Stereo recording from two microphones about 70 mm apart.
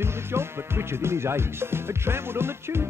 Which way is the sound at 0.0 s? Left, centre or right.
Right.